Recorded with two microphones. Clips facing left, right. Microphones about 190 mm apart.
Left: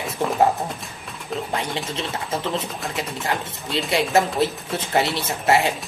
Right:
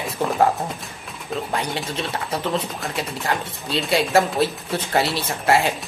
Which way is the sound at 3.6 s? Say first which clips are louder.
Right 1 dB; 20° left (ahead or behind).